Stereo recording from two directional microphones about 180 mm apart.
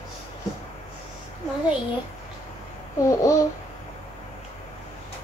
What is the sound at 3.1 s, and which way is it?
Speech, 20° left (ahead or behind).